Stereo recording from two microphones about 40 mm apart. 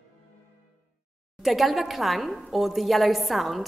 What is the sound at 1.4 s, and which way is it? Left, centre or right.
A woman's voice, centre.